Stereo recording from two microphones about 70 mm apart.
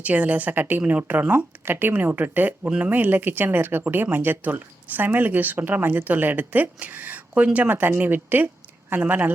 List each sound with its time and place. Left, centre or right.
0.0 s speech: right